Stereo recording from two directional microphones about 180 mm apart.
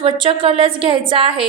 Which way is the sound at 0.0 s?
30° right (ahead or behind).